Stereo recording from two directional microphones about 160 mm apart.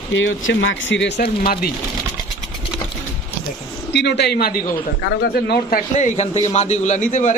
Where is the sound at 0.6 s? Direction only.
90° left; by 1.7 s 70° left (ahead or behind).